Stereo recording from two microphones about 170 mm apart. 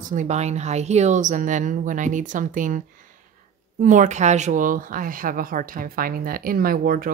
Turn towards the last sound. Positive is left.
turn(degrees=-60)  # may be behind; listen again after turning